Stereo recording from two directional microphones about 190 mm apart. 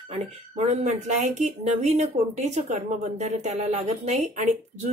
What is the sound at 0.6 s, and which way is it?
Speech, 35° right (ahead or behind).